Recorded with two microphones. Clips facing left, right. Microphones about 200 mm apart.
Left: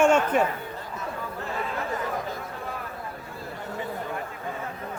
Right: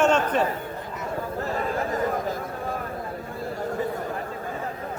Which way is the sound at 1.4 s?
40° right (ahead or behind).